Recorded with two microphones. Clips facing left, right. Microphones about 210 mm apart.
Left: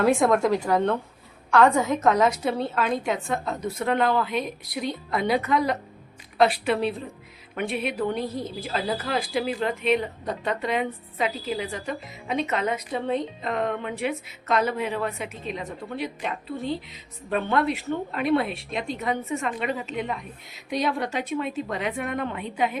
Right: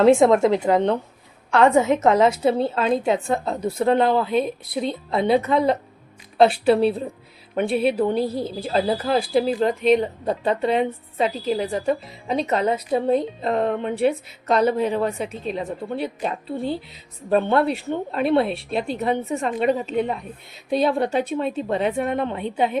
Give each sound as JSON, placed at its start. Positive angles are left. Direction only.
{"t": 0.0, "sound": "a woman's voice", "side_deg": -25}